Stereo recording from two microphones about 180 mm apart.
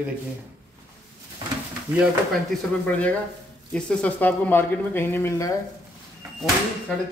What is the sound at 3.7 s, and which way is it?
Speech, 5° left (ahead or behind).